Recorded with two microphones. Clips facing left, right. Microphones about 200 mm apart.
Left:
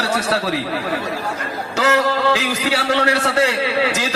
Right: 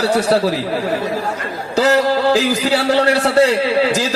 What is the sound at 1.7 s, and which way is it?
A man's voice, 35° right (ahead or behind).